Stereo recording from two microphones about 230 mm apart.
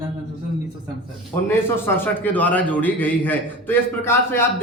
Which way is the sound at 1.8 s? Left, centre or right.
Centre.